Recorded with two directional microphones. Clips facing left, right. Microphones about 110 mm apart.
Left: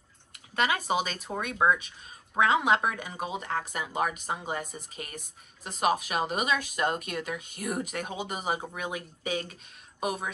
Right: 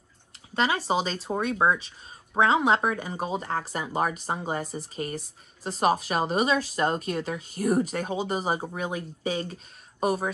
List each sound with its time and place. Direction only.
0.6 s speech: 30° right (ahead or behind)